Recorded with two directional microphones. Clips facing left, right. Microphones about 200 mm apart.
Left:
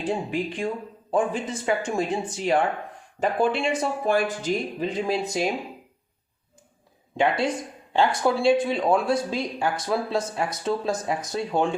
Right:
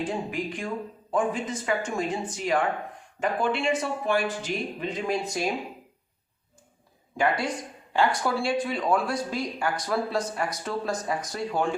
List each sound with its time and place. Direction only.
0.0 s speech: 30° left (ahead or behind)
3.8 s speech: 40° left (ahead or behind)
7.2 s speech: 25° left (ahead or behind)